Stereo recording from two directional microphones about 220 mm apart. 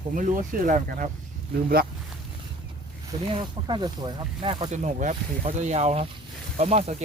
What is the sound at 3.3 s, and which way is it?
Speech, 20° right (ahead or behind).